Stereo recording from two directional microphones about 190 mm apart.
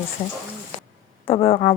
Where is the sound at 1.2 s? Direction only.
30° left (ahead or behind).